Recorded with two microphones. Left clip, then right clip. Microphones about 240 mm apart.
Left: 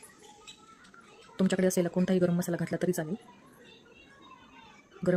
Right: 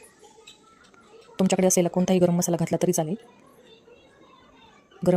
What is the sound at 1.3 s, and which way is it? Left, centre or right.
A woman's voice, centre.